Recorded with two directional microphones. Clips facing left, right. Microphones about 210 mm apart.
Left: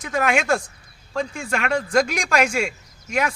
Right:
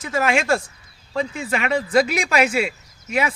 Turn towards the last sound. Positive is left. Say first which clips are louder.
# right 1 dB
turn(degrees=-5)  # may be behind; listen again after turning